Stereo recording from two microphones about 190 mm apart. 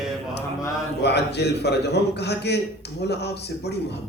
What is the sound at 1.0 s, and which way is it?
A man's voice, 60° left (ahead or behind).